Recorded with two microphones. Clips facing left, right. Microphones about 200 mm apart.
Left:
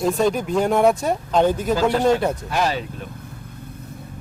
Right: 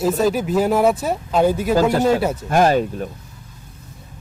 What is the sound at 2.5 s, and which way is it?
Speech, 50° right (ahead or behind).